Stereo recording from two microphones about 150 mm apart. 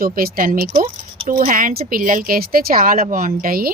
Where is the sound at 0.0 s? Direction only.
80° right.